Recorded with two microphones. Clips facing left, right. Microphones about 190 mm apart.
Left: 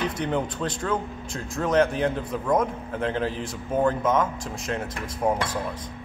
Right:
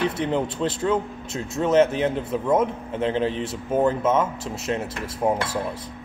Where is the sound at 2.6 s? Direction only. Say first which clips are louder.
Right 3 dB; 25° right (ahead or behind).